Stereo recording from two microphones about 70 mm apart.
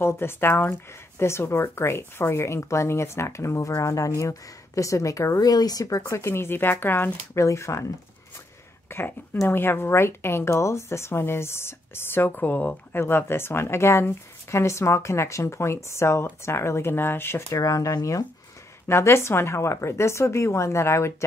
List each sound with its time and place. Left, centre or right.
0.0 s speech: left
5.5 s speech: left
6.0 s speech: left
7.3 s speech: left
8.9 s speech: left
17.5 s speech: left
18.9 s speech: left